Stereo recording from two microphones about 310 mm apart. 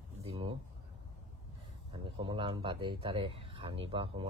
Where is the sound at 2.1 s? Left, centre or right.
Centre.